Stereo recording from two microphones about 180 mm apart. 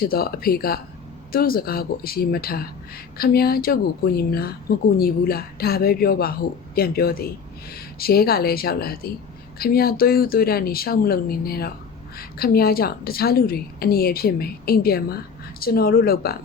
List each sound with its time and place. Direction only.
0.0 s a woman's voice: 55° left (ahead or behind)